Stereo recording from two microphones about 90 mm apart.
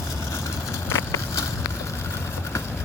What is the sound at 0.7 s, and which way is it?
Vehicle, 30° left (ahead or behind).